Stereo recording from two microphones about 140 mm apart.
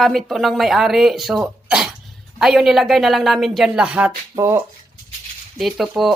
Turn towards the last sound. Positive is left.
turn(degrees=-5)  # may be behind; listen again after turning